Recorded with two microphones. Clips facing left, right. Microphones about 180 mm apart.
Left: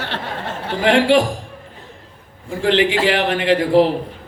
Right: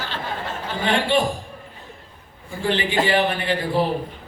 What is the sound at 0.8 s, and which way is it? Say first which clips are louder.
Speech: left 7 dB; 90° left.